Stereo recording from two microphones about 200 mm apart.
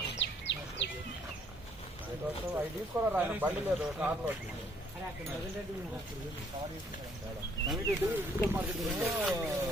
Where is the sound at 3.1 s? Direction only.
10° right (ahead or behind).